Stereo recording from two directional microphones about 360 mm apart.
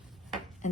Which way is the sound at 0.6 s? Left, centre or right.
Centre.